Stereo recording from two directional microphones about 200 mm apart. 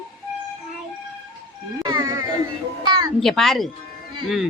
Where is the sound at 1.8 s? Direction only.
20° right (ahead or behind).